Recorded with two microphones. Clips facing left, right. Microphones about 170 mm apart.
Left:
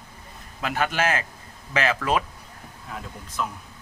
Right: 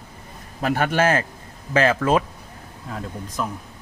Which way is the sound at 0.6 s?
40° right (ahead or behind).